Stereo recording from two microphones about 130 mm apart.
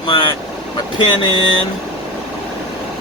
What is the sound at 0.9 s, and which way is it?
Speech, 40° left (ahead or behind).